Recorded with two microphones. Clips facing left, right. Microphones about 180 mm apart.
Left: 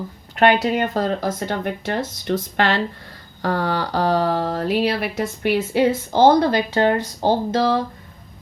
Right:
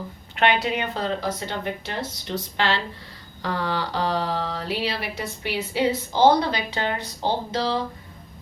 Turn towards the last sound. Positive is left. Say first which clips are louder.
# left 6 dB
turn(degrees=50)  # may be behind; listen again after turning